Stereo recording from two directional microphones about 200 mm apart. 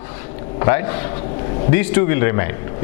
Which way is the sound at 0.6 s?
15° left (ahead or behind).